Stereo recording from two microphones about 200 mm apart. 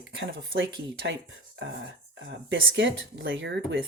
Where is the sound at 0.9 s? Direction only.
65° right (ahead or behind).